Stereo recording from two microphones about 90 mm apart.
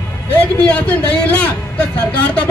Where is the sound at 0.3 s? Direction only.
20° left (ahead or behind).